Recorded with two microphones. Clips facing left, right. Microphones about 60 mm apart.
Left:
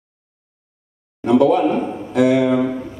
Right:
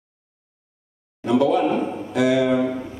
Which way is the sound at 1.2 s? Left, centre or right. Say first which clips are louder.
Left 4 dB; left.